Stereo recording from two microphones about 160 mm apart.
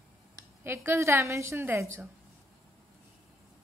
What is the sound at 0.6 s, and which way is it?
A woman's voice, 15° right (ahead or behind).